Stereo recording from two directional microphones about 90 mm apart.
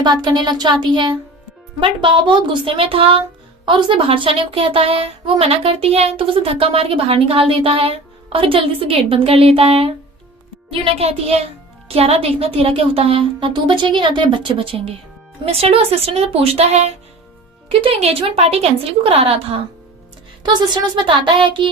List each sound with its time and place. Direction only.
0.0 s speech: 55° right (ahead or behind); by 3.2 s 90° right
3.7 s a woman's voice: 70° right (ahead or behind); by 16.6 s 90° right
17.7 s a woman's voice: 85° right
20.4 s speech: 50° right (ahead or behind); by 21.7 s 65° right (ahead or behind)